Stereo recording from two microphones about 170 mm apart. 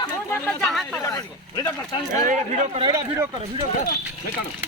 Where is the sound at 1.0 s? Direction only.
20° left (ahead or behind).